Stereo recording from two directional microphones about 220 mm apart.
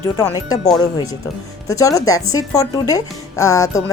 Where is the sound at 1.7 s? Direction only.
15° left (ahead or behind).